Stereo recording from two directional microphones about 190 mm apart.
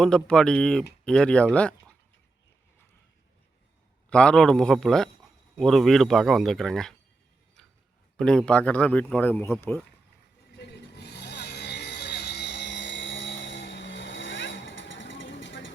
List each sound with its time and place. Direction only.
0.0 s speech: 5° left (ahead or behind)
4.1 s speech: 5° left (ahead or behind)
8.1 s speech: 5° left (ahead or behind)
10.6 s vehicle: 60° left (ahead or behind)